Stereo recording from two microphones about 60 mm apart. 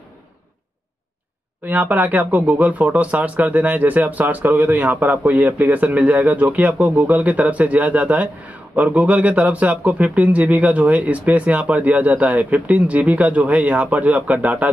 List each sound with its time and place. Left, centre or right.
1.6 s speech: right